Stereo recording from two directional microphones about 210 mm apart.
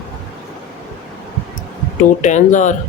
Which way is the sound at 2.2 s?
35° left (ahead or behind).